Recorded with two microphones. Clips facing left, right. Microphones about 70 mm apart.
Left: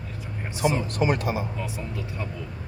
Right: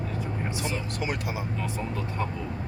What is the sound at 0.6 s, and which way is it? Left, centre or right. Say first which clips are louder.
Speech: left 11 dB; left.